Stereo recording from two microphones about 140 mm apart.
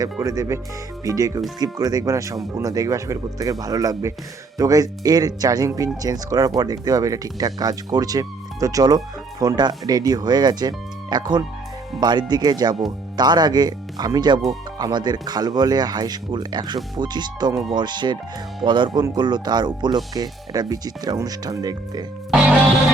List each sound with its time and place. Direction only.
0.0 s speech: 25° right (ahead or behind)